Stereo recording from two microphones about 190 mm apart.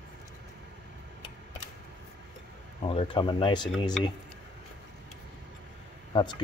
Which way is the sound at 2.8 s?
25° left (ahead or behind).